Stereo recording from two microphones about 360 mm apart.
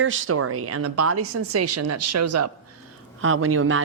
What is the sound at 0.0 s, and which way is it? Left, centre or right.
Speech, right.